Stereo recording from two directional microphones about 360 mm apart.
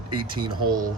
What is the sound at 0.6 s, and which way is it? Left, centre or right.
Speech, right.